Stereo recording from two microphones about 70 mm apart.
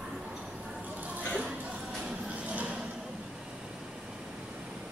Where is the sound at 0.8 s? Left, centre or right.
Right.